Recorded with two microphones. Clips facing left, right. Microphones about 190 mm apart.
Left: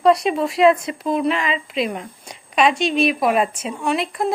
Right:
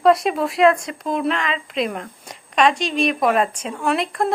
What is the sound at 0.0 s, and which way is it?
A woman's voice, centre (ahead or behind).